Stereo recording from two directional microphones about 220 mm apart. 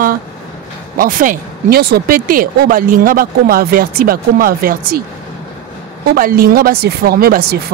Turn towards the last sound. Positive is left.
turn(degrees=-45)  # may be behind; listen again after turning